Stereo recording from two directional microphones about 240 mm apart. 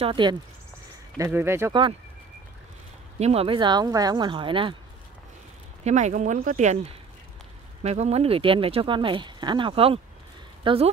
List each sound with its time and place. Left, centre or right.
0.0 s speech: centre
3.2 s speech: right
5.9 s speech: right